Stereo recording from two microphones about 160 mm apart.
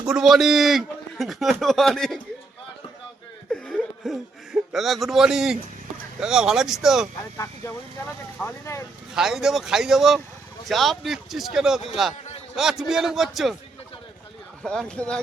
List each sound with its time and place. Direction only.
0.0 s a man's voice: 5° right (ahead or behind)
3.5 s a sound: 5° left (ahead or behind)
6.1 s a man's voice: 5° right (ahead or behind)
7.3 s speech: 20° left (ahead or behind)
9.1 s a man's voice: centre (ahead or behind)
14.6 s a man's voice: 5° left (ahead or behind)